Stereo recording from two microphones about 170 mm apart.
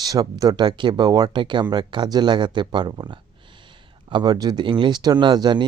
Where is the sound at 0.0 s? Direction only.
20° right (ahead or behind).